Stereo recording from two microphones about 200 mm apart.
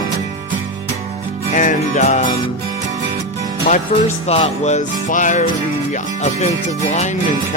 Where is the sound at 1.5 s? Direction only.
40° left (ahead or behind).